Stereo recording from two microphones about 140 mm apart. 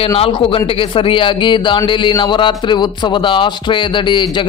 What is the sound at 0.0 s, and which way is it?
A man's voice, 40° left (ahead or behind).